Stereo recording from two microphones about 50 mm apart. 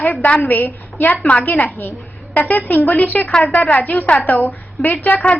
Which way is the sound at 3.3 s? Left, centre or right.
Left.